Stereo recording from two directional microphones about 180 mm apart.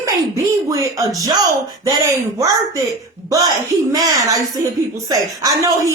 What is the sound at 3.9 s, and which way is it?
Speech, 20° right (ahead or behind).